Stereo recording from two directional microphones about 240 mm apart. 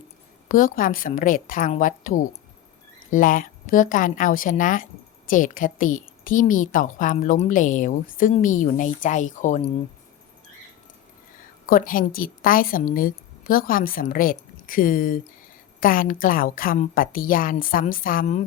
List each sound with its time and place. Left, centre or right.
0.4 s a woman's voice: left
11.6 s a woman's voice: left